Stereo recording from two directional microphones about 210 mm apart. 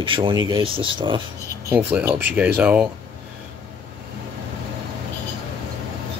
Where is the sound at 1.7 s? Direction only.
10° right (ahead or behind).